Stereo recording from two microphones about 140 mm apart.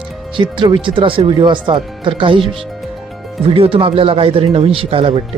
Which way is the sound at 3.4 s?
40° right (ahead or behind).